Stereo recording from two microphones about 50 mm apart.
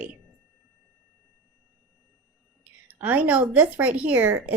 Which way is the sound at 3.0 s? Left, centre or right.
Right.